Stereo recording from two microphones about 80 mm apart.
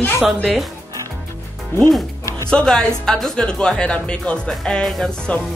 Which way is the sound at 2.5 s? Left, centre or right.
Centre.